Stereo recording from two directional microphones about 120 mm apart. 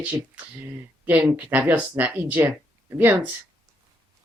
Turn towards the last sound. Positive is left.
turn(degrees=-15)  # may be behind; listen again after turning